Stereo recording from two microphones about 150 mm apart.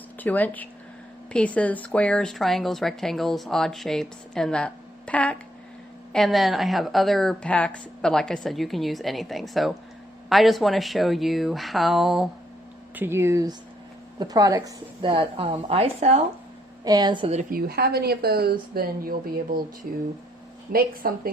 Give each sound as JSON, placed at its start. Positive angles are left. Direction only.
{"t": 0.2, "sound": "speech", "side_deg": 10}
{"t": 13.0, "sound": "a woman's voice", "side_deg": -15}
{"t": 16.8, "sound": "speech", "side_deg": -25}
{"t": 17.5, "sound": "speech", "side_deg": -90}
{"t": 20.7, "sound": "speech", "side_deg": -65}